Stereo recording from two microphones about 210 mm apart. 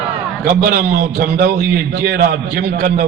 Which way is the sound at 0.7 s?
50° right (ahead or behind).